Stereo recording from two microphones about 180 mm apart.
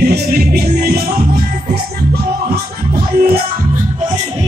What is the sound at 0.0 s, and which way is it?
Music, 60° right (ahead or behind).